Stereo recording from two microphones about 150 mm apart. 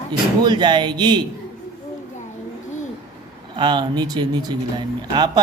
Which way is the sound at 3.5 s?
30° right (ahead or behind).